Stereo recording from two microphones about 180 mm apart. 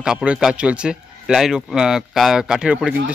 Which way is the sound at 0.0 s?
5° right (ahead or behind).